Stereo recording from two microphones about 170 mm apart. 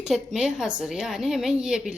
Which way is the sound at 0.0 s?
5° right (ahead or behind).